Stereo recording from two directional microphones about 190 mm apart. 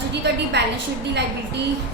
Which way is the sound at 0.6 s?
60° right (ahead or behind).